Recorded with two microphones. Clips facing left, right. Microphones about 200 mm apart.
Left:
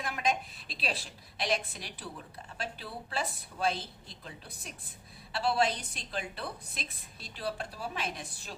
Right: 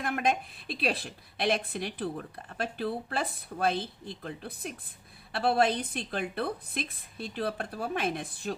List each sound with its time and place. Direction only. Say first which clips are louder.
0.0 s a woman's voice: right 4 dB; 55° right (ahead or behind)